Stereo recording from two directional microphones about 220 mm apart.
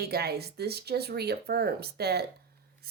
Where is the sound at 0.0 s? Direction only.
45° right (ahead or behind).